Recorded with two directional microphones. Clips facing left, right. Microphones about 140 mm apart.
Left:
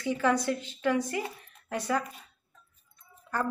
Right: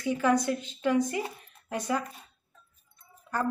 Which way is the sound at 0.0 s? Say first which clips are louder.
Right 1 dB; 15° right (ahead or behind).